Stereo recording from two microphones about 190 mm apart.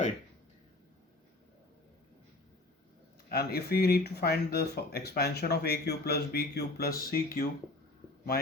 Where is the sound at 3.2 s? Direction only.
55° left (ahead or behind).